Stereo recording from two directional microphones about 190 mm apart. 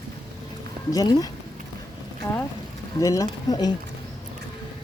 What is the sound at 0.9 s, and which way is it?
Speech, 20° left (ahead or behind).